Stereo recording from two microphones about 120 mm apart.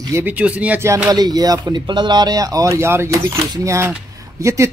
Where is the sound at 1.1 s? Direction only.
30° right (ahead or behind).